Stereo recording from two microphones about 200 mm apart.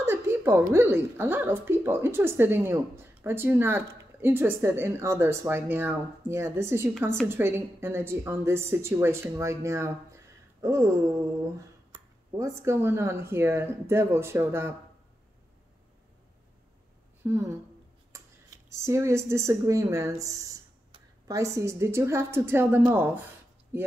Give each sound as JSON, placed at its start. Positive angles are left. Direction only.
{"t": 0.0, "sound": "speech", "side_deg": -10}
{"t": 17.2, "sound": "speech", "side_deg": -15}
{"t": 18.7, "sound": "speech", "side_deg": -15}